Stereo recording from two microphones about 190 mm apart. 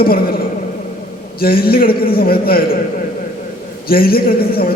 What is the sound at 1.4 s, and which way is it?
A man's voice, 50° left (ahead or behind).